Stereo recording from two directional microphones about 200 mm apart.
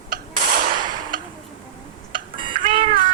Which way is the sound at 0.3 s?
45° right (ahead or behind).